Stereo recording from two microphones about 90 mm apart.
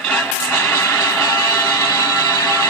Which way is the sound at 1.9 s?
40° left (ahead or behind).